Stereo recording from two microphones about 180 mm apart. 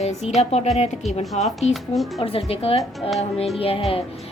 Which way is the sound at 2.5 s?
30° left (ahead or behind).